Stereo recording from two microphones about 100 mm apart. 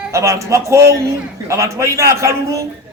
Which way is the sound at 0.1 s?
30° right (ahead or behind).